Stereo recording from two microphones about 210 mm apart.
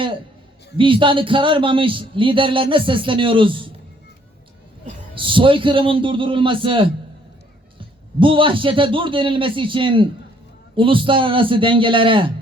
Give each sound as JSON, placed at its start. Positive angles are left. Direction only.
{"t": 0.8, "sound": "a man's voice", "side_deg": -25}
{"t": 5.1, "sound": "a man's voice", "side_deg": -25}